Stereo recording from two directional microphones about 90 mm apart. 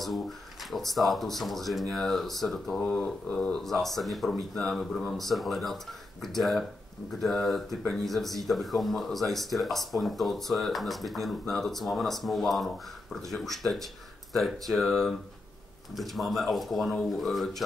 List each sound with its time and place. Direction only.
0.7 s speech: centre (ahead or behind)
2.8 s speech: 15° left (ahead or behind)